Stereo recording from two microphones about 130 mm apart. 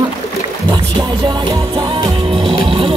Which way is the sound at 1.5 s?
35° right (ahead or behind).